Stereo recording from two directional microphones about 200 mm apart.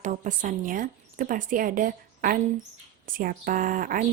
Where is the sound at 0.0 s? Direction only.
40° right (ahead or behind).